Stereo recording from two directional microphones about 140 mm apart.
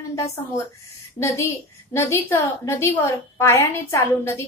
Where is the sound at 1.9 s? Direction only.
15° left (ahead or behind).